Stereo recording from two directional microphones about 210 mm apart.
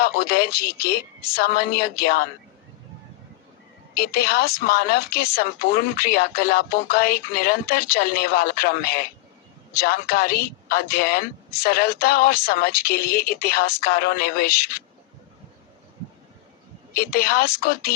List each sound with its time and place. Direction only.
0.0 s a woman's voice: 45° left (ahead or behind)
3.9 s a woman's voice: 45° left (ahead or behind)
16.9 s a woman's voice: 45° left (ahead or behind)